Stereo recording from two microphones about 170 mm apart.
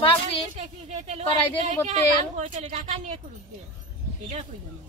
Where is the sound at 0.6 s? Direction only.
40° right (ahead or behind).